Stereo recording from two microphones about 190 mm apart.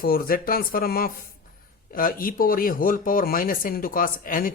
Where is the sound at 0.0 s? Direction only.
50° left (ahead or behind).